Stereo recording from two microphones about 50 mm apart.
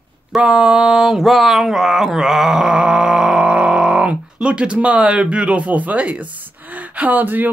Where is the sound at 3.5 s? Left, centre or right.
Centre.